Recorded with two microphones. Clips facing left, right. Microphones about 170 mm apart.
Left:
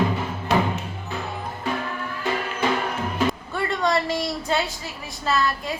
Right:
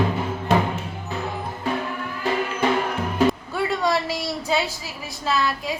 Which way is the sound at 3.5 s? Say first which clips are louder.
Right 1 dB; 5° right (ahead or behind).